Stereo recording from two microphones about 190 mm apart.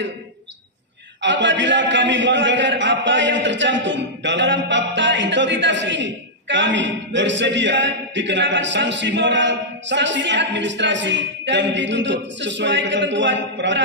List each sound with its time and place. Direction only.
1.2 s a man's voice: 70° right (ahead or behind)